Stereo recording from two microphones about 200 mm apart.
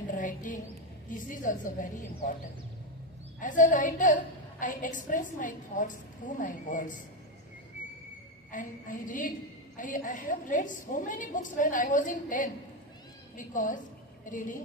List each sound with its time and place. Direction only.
0.1 s a sound: 40° left (ahead or behind)
1.1 s a woman's voice: 40° left (ahead or behind)
3.3 s a woman's voice: 40° left (ahead or behind)
8.5 s a woman's voice: 40° left (ahead or behind)